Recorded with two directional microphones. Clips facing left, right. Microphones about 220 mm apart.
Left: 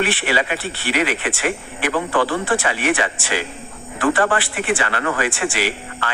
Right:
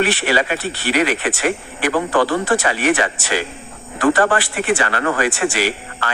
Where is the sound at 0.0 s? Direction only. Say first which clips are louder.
Right 3 dB; 40° right (ahead or behind).